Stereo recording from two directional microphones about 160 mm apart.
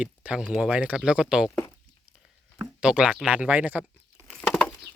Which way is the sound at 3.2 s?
10° right (ahead or behind).